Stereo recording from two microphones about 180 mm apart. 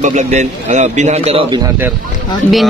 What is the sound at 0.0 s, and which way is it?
A man's voice, 40° right (ahead or behind).